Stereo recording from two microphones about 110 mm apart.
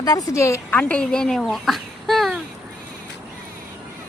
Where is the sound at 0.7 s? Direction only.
10° left (ahead or behind).